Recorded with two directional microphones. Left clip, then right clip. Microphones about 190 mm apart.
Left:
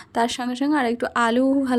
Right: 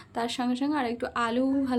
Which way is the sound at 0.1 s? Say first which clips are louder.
Left 7 dB; 40° left (ahead or behind).